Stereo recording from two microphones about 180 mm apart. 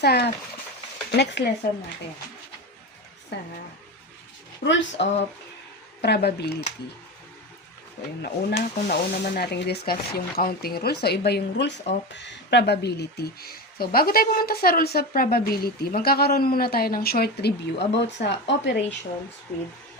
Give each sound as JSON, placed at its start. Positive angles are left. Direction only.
{"t": 0.0, "sound": "speech", "side_deg": 65}
{"t": 3.3, "sound": "speech", "side_deg": 70}
{"t": 4.6, "sound": "speech", "side_deg": 85}
{"t": 6.0, "sound": "speech", "side_deg": 65}
{"t": 8.2, "sound": "speech", "side_deg": 60}